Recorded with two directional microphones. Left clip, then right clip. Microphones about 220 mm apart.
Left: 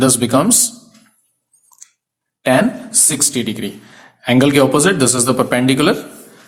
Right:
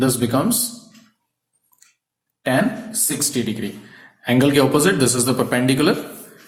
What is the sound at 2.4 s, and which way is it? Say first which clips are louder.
Speech: left 6 dB; 30° left (ahead or behind).